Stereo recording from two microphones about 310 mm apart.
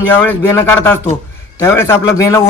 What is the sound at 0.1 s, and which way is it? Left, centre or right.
A man's voice, centre.